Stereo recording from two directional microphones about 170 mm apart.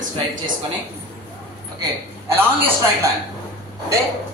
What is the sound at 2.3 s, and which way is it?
Speech, 10° right (ahead or behind).